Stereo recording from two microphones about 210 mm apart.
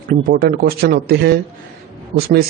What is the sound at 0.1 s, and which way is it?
A man's voice, 40° right (ahead or behind).